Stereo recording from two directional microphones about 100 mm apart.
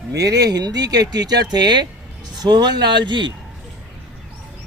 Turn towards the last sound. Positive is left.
turn(degrees=-50)  # may be behind; listen again after turning